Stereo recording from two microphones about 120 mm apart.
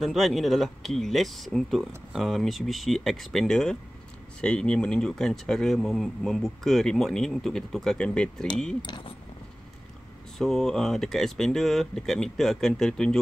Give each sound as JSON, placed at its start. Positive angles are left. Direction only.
{"t": 0.0, "sound": "speech", "side_deg": 0}
{"t": 8.8, "sound": "speech", "side_deg": 40}
{"t": 10.3, "sound": "speech", "side_deg": 5}